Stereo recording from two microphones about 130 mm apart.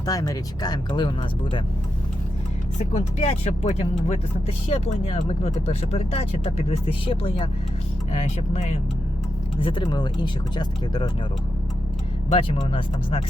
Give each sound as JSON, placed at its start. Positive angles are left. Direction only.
{"t": 0.0, "sound": "speech", "side_deg": 25}
{"t": 2.7, "sound": "speech", "side_deg": 55}
{"t": 9.6, "sound": "speech", "side_deg": 40}
{"t": 12.3, "sound": "speech", "side_deg": 45}